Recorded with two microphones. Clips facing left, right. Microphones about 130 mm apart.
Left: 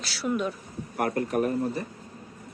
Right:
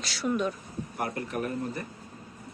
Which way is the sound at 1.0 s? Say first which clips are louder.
Left 7 dB; 50° left (ahead or behind).